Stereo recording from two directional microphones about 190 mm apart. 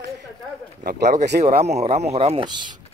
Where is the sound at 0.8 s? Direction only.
60° right (ahead or behind).